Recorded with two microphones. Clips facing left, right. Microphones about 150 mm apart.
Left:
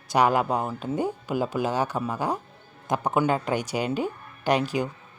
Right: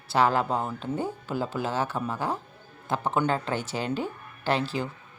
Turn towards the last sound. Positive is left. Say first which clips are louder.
# left 3 dB
turn(degrees=15)  # may be behind; listen again after turning